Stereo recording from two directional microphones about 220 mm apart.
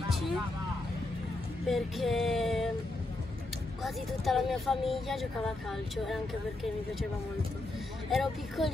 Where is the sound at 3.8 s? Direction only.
Centre (ahead or behind).